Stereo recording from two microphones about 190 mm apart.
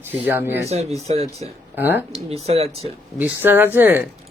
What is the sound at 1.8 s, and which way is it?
Speech, 10° right (ahead or behind).